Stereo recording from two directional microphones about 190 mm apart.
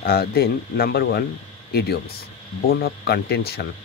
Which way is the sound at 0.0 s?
55° left (ahead or behind).